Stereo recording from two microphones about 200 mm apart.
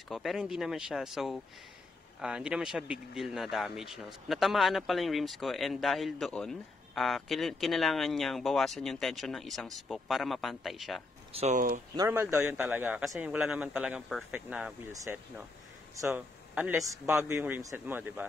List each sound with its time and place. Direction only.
0.1 s speech: centre (ahead or behind)
11.3 s speech: 35° right (ahead or behind)
12.0 s a man's voice: 15° right (ahead or behind)